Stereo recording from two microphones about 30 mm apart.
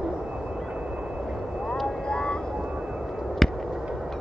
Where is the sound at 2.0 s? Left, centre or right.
Left.